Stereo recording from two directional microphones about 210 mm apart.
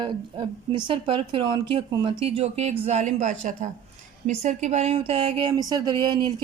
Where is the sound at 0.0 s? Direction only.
20° right (ahead or behind).